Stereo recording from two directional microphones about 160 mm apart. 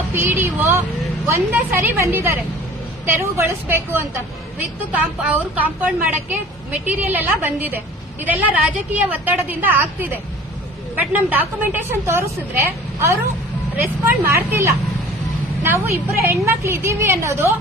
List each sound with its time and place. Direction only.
0.1 s a woman's voice: 15° right (ahead or behind)